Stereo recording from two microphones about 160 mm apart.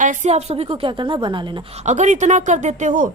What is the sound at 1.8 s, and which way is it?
A woman's voice, 45° right (ahead or behind).